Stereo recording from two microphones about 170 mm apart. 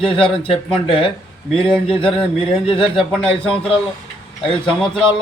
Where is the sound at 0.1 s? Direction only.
30° left (ahead or behind).